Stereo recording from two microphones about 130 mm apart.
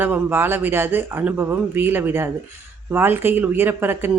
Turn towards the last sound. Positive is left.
turn(degrees=-15)  # may be behind; listen again after turning